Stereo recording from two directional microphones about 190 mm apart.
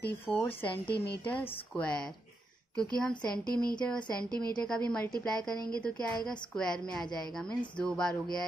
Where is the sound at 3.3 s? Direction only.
5° left (ahead or behind).